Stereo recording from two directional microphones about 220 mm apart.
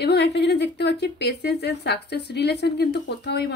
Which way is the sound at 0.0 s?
50° left (ahead or behind).